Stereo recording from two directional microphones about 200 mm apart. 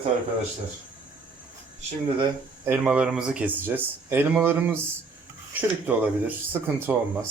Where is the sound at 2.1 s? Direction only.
25° right (ahead or behind).